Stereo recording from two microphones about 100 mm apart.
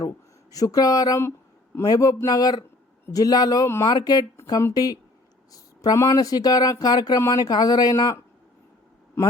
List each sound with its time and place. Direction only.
0.5 s speech: 35° left (ahead or behind)